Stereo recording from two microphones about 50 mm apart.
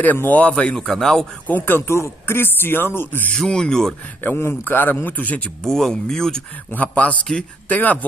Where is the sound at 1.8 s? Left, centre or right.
Left.